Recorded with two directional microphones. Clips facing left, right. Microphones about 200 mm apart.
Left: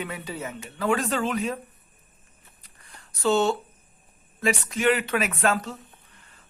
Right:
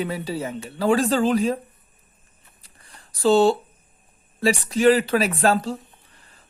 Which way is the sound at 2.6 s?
30° right (ahead or behind).